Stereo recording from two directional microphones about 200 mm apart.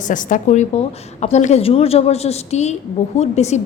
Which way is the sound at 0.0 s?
40° left (ahead or behind).